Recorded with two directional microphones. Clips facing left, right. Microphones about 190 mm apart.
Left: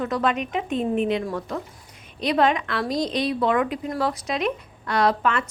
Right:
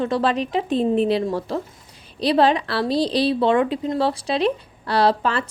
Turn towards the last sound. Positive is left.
turn(degrees=-30)  # may be behind; listen again after turning